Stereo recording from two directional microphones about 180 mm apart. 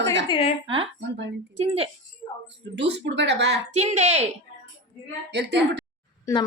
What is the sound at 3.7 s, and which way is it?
Speech, 40° right (ahead or behind).